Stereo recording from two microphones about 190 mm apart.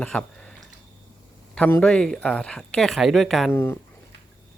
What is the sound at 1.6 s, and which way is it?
Speech, 10° left (ahead or behind).